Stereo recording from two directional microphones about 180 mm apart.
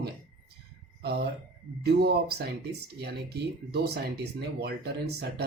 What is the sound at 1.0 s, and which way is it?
Speech, 65° right (ahead or behind).